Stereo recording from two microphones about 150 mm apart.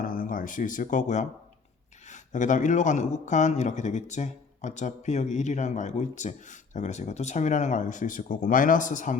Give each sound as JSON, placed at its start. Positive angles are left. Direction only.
{"t": 0.0, "sound": "a man's voice", "side_deg": 70}